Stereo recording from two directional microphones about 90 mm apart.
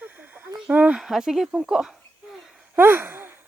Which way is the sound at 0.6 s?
15° right (ahead or behind).